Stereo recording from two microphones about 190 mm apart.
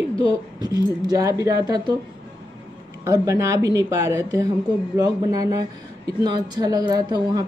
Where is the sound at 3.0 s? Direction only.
15° right (ahead or behind).